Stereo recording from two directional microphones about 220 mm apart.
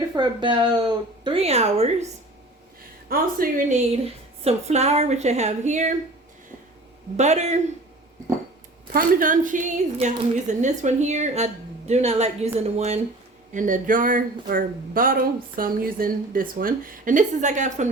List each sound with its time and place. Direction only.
0.2 s speech: 20° right (ahead or behind)
3.1 s speech: 40° right (ahead or behind)
7.2 s speech: 30° right (ahead or behind)
8.9 s speech: 40° right (ahead or behind)